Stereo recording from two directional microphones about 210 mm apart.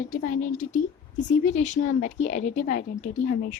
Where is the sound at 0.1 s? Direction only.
40° left (ahead or behind).